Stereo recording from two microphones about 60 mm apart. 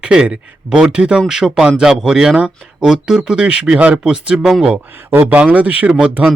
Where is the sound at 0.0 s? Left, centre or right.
Centre.